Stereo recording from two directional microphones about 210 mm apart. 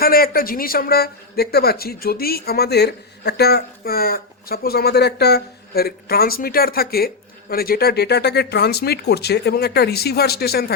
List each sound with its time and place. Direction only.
0.0 s a man's voice: 45° left (ahead or behind)